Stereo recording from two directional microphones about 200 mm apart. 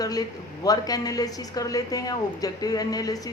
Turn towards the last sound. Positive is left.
turn(degrees=20)  # may be behind; listen again after turning